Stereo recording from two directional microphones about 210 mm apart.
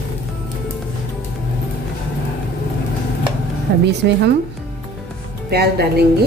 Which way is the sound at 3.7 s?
50° right (ahead or behind).